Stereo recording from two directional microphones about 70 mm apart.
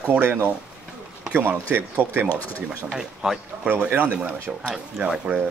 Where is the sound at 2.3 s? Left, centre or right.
Left.